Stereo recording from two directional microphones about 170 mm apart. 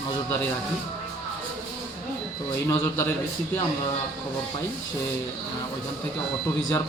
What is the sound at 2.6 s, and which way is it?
Speech, 20° left (ahead or behind).